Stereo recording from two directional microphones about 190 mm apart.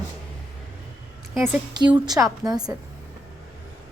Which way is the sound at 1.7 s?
20° right (ahead or behind).